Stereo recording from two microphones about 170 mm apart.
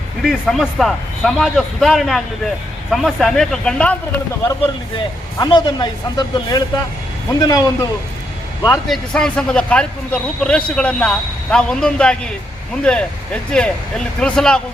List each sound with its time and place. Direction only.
0.2 s speech: centre (ahead or behind)
5.4 s speech: 25° left (ahead or behind)
8.9 s speech: 5° left (ahead or behind)